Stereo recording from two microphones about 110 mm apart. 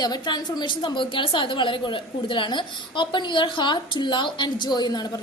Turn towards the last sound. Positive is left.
turn(degrees=40)  # may be behind; listen again after turning